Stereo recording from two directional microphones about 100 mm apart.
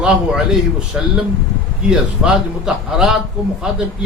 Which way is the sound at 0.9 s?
10° right (ahead or behind).